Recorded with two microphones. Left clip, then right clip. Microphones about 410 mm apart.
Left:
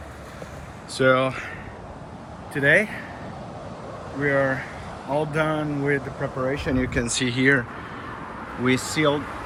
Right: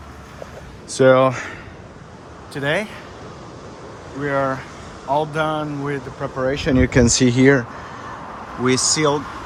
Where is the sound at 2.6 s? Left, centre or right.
Centre.